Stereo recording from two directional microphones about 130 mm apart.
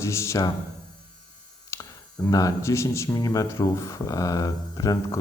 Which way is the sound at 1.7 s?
20° left (ahead or behind).